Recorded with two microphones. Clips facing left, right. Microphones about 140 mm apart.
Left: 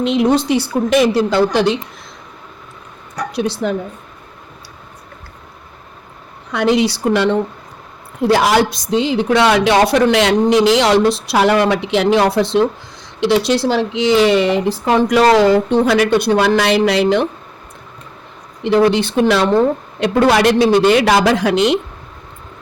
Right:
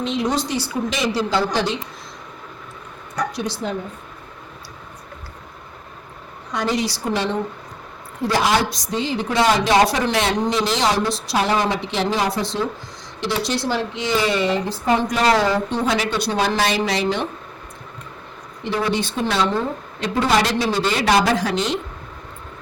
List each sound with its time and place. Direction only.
0.0 s a woman's voice: 65° left (ahead or behind)
3.3 s a woman's voice: 65° left (ahead or behind)
6.5 s a woman's voice: 70° left (ahead or behind)
13.2 s a woman's voice: 80° left
15.4 s a woman's voice: 65° left (ahead or behind)
18.6 s a woman's voice: 75° left (ahead or behind)